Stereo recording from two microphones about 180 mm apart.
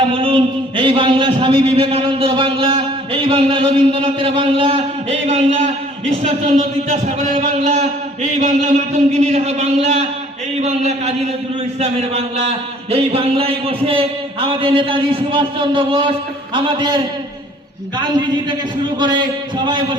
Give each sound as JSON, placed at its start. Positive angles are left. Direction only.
{"t": 0.1, "sound": "a man's voice", "side_deg": -30}
{"t": 6.2, "sound": "a sound", "side_deg": -35}
{"t": 14.4, "sound": "a man's voice", "side_deg": -30}